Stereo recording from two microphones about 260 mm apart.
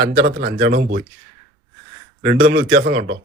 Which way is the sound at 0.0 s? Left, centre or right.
Right.